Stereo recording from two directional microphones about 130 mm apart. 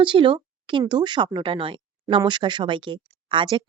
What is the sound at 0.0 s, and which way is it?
Speech, 40° right (ahead or behind).